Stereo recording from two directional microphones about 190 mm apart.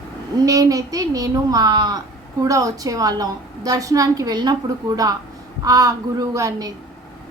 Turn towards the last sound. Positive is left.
turn(degrees=-20)  # may be behind; listen again after turning